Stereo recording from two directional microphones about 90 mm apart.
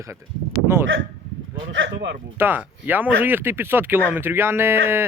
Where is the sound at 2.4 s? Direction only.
20° right (ahead or behind).